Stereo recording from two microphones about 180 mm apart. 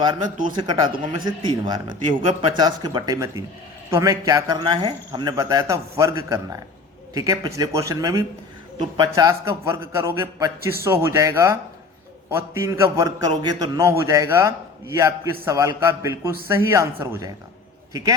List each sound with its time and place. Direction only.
0.5 s a man's voice: 25° right (ahead or behind)